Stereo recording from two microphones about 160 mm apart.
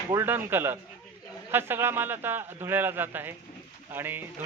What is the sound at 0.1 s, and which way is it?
Speech, 15° right (ahead or behind).